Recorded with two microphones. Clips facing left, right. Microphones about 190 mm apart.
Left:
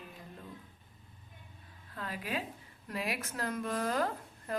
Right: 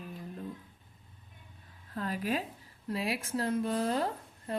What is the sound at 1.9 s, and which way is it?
Speech, 40° right (ahead or behind).